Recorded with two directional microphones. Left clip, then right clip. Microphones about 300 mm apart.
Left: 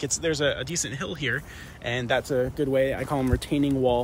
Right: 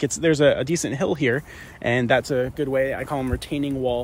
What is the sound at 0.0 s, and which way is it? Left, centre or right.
Speech, right.